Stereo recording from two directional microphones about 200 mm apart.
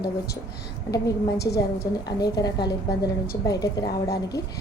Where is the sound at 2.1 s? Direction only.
20° left (ahead or behind).